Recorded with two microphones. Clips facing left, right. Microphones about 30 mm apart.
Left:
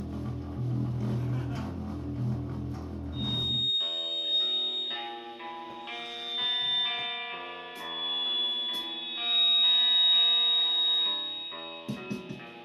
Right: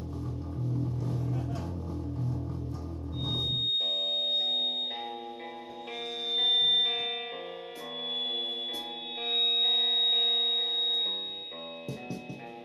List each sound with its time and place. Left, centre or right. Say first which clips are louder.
0.9 s music: left 1 dB; left
3.2 s music: left 1 dB; left
3.5 s music: right 1 dB; left
6.4 s music: right 5 dB; left
6.7 s music: right 3 dB; left